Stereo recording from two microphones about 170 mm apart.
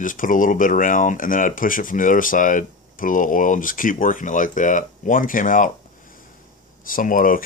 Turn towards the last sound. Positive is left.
turn(degrees=55)  # may be behind; listen again after turning